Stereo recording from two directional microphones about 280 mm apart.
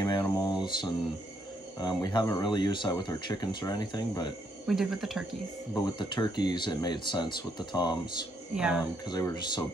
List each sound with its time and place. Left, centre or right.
0.0 s a sound: centre
1.8 s speech: centre
4.6 s speech: centre
5.8 s speech: centre
8.5 s speech: centre
9.1 s speech: centre